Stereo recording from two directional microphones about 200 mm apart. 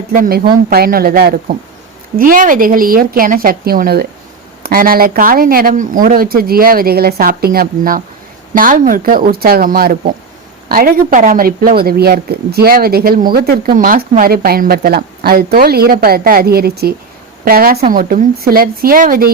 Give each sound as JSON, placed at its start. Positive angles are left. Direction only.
{"t": 0.1, "sound": "speech", "side_deg": -50}